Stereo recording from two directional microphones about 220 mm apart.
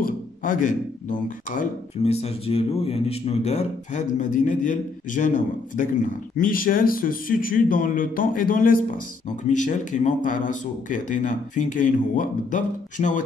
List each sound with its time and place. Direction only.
0.0 s speech: 35° left (ahead or behind)